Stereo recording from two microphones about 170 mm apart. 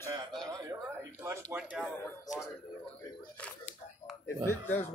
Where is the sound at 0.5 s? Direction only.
20° right (ahead or behind).